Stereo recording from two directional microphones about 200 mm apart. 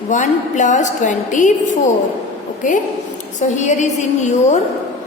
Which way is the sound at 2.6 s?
40° left (ahead or behind).